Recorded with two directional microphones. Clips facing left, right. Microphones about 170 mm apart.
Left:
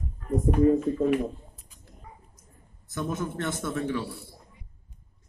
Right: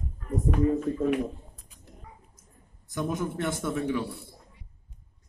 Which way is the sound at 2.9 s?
15° right (ahead or behind).